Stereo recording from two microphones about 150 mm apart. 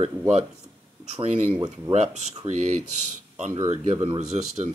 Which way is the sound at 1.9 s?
50° right (ahead or behind).